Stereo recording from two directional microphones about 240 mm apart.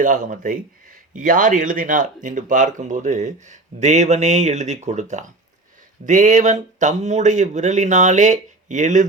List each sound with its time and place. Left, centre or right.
0.0 s speech: right